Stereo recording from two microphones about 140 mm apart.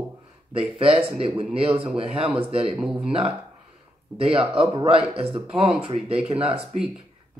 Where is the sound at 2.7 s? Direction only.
5° right (ahead or behind).